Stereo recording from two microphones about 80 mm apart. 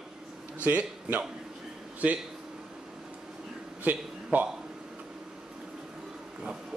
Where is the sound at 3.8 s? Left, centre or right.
Right.